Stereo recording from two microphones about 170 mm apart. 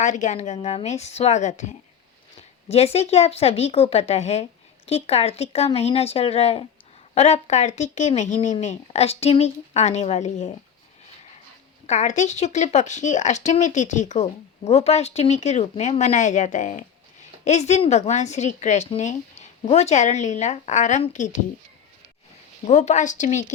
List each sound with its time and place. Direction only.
0.0 s speech: 45° left (ahead or behind)
11.9 s speech: 45° left (ahead or behind)
22.6 s speech: 45° left (ahead or behind)